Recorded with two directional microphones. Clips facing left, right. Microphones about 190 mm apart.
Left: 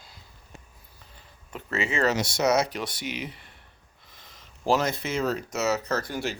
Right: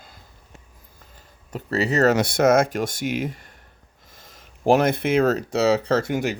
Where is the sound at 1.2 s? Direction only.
40° right (ahead or behind).